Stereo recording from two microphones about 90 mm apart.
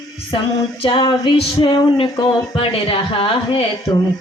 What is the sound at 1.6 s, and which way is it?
Speech, 65° left (ahead or behind).